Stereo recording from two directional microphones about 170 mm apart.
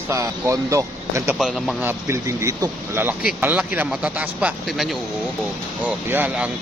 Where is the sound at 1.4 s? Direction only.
Centre (ahead or behind).